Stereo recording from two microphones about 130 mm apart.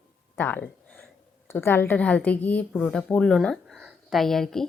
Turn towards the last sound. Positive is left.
turn(degrees=5)  # may be behind; listen again after turning